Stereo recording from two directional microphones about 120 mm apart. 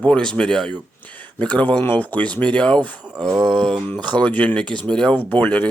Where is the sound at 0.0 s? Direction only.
10° left (ahead or behind).